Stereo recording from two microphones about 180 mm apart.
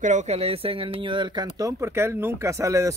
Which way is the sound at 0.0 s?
40° right (ahead or behind).